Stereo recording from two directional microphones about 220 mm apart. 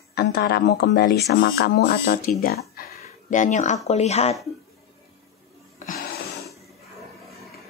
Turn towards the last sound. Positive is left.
turn(degrees=40)  # may be behind; listen again after turning